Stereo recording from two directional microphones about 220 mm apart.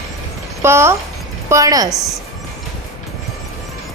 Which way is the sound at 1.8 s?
Centre (ahead or behind).